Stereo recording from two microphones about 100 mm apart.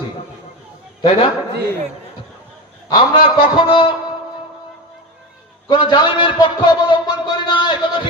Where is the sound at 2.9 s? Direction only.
55° left (ahead or behind).